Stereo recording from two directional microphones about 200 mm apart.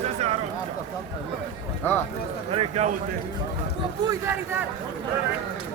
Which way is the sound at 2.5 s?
30° right (ahead or behind).